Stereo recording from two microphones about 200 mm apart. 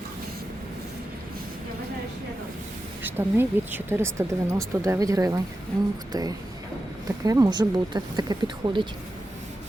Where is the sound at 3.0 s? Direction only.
10° right (ahead or behind).